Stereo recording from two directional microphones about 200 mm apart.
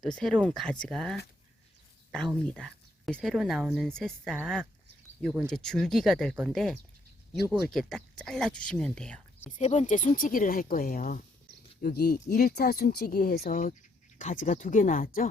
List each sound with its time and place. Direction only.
0.0 s speech: 5° left (ahead or behind)
9.5 s speech: 35° left (ahead or behind)